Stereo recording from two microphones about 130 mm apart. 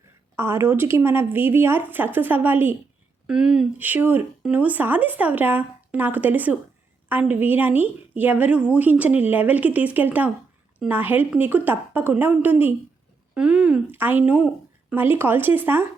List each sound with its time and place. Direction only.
0.3 s a woman's voice: 20° right (ahead or behind)